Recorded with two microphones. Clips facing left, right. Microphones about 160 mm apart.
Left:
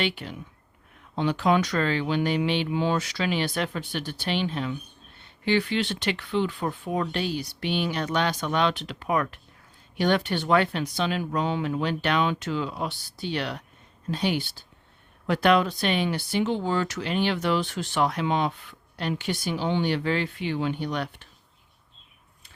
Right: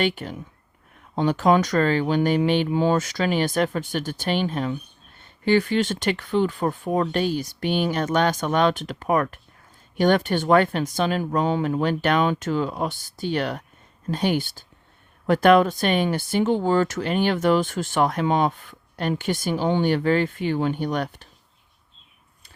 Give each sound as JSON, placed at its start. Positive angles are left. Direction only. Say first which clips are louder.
{"t": 0.0, "sound": "speech", "louder": "right 5 dB", "side_deg": -45}